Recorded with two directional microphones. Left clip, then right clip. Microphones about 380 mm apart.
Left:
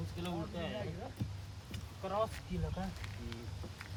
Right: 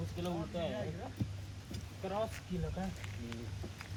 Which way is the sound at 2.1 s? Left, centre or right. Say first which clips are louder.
Left 2 dB; centre.